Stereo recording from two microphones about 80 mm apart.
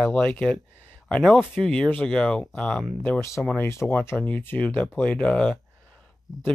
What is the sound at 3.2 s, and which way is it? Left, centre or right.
Speech, left.